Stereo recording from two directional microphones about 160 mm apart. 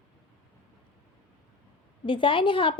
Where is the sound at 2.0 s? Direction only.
30° left (ahead or behind).